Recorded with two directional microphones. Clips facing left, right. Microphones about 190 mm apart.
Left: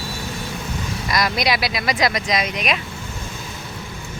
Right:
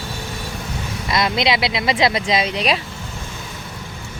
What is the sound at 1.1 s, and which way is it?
Speech, 25° right (ahead or behind).